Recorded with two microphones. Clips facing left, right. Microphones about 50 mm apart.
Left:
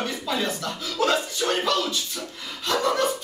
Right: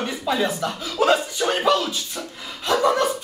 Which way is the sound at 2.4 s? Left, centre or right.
Centre.